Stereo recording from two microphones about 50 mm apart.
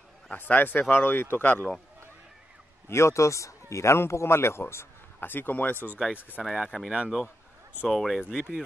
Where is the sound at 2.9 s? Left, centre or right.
Left.